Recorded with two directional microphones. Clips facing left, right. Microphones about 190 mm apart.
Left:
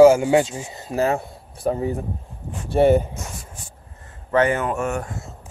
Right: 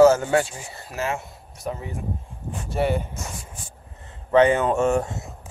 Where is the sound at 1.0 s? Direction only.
35° left (ahead or behind).